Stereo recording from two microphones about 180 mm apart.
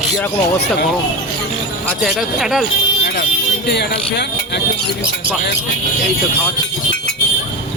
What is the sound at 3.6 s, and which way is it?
Speech, 70° left (ahead or behind).